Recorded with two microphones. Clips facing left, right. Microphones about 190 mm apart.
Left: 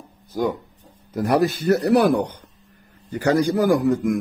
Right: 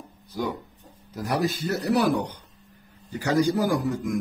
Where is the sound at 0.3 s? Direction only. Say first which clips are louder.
Left 6 dB; 50° left (ahead or behind).